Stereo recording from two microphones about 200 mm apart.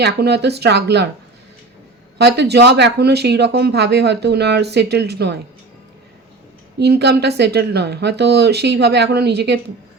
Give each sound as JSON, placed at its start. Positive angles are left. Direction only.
{"t": 0.0, "sound": "speech", "side_deg": -55}
{"t": 2.1, "sound": "speech", "side_deg": -55}
{"t": 6.7, "sound": "speech", "side_deg": -55}